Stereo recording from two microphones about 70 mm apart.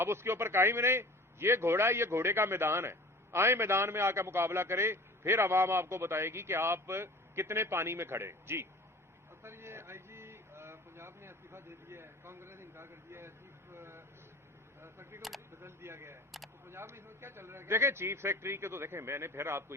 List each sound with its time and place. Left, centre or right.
0.0 s a man's voice: right
9.4 s a sound: right
14.8 s camera: right
15.6 s a man's voice: right
16.3 s a sound: centre
16.6 s a man's voice: right